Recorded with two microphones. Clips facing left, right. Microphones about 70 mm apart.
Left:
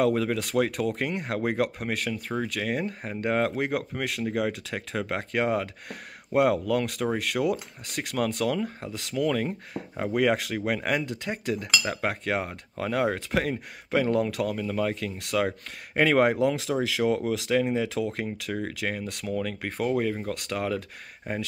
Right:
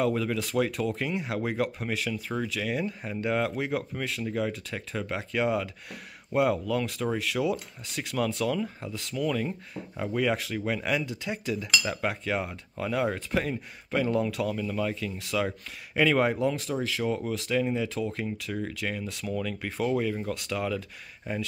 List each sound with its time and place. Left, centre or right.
0.0 s speech: left
17.8 s speech: left
19.2 s speech: left